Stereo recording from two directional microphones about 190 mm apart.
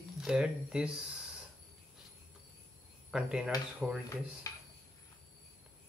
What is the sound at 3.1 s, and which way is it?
Speech, 5° right (ahead or behind).